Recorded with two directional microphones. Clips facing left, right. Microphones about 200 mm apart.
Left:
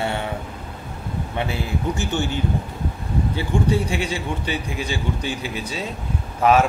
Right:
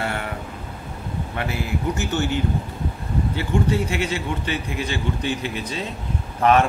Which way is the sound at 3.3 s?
15° left (ahead or behind).